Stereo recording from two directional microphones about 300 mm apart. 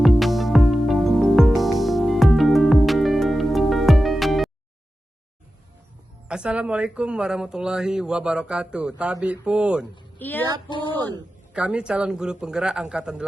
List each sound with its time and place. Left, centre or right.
0.0 s music: centre
6.2 s a woman's voice: centre
11.5 s speech: centre